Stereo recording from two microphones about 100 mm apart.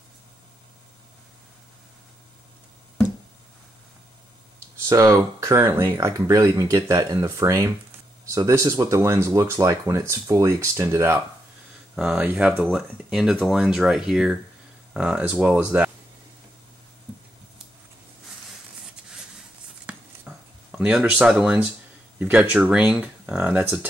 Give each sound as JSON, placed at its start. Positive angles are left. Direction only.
{"t": 4.7, "sound": "speech", "side_deg": -30}
{"t": 11.9, "sound": "speech", "side_deg": -10}
{"t": 12.6, "sound": "speech", "side_deg": 0}
{"t": 19.9, "sound": "a sound", "side_deg": -10}
{"t": 21.3, "sound": "speech", "side_deg": -10}
{"t": 23.6, "sound": "speech", "side_deg": -25}